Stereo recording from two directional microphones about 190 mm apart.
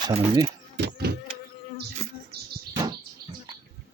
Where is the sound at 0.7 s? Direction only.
60° right (ahead or behind).